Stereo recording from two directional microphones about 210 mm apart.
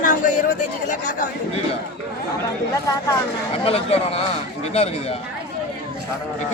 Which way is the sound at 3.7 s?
30° left (ahead or behind).